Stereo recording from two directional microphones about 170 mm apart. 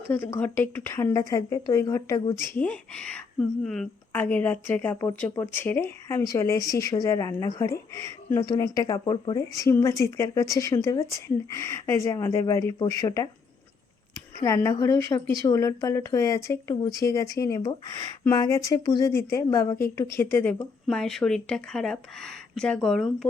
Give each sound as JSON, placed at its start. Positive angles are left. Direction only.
{"t": 0.1, "sound": "a woman's voice", "side_deg": 10}
{"t": 14.4, "sound": "a woman's voice", "side_deg": 15}